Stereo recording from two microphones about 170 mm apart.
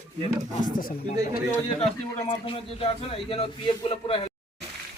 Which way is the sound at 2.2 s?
30° left (ahead or behind).